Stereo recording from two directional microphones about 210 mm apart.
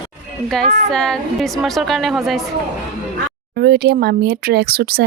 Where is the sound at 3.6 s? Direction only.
50° right (ahead or behind).